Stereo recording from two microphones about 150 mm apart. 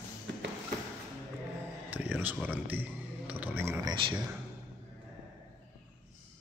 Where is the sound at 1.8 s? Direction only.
10° right (ahead or behind).